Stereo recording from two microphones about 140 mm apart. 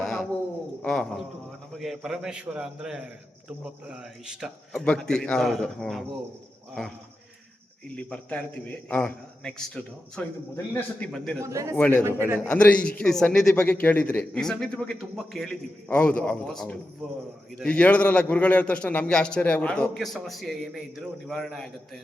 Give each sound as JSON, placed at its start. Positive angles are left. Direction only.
{"t": 0.0, "sound": "a sound", "side_deg": 0}
{"t": 0.8, "sound": "a man's voice", "side_deg": 5}
{"t": 7.9, "sound": "a man's voice", "side_deg": 10}
{"t": 11.4, "sound": "a man's voice", "side_deg": -20}
{"t": 11.8, "sound": "a man's voice", "side_deg": 10}
{"t": 12.0, "sound": "a man's voice", "side_deg": -20}
{"t": 12.5, "sound": "a man's voice", "side_deg": 10}